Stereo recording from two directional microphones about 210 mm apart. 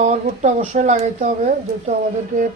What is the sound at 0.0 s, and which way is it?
Speech, 30° right (ahead or behind).